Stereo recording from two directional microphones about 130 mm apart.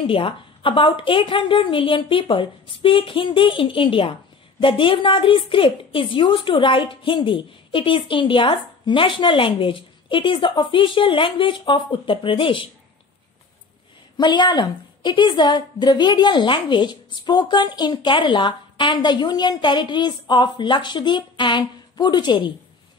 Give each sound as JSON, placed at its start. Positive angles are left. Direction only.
{"t": 0.0, "sound": "a woman's voice", "side_deg": 45}
{"t": 14.1, "sound": "a woman's voice", "side_deg": 35}